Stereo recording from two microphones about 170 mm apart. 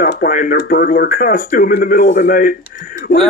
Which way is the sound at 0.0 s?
55° left (ahead or behind).